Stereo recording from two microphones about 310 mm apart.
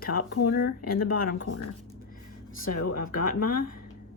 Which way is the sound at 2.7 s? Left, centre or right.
Left.